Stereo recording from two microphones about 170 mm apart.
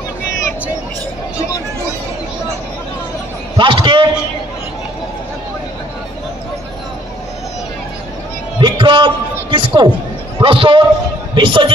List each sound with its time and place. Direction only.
3.5 s a man's voice: 30° right (ahead or behind)
8.5 s a sound: 25° right (ahead or behind)
10.4 s a man's voice: 30° right (ahead or behind)